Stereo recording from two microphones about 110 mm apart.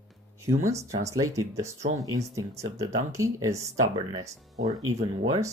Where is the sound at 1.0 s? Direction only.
30° right (ahead or behind).